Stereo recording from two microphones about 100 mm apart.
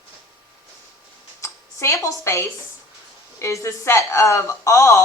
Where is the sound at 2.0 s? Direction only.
25° left (ahead or behind).